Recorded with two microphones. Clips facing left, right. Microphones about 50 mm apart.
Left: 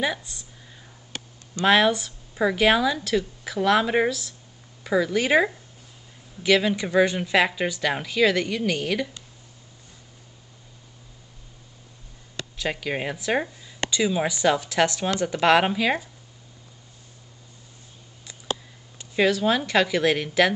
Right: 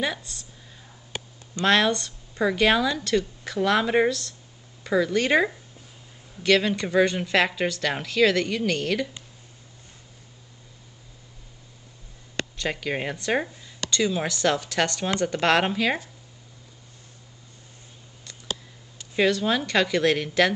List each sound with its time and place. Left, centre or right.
0.0 s speech: centre
1.1 s a sound: centre
1.7 s speech: centre
12.5 s speech: centre
19.1 s speech: centre